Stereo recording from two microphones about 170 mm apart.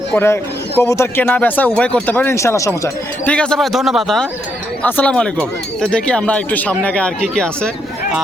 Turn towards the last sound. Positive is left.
turn(degrees=5)  # may be behind; listen again after turning